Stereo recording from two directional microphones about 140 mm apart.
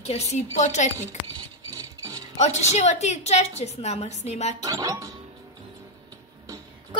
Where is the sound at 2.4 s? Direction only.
50° left (ahead or behind).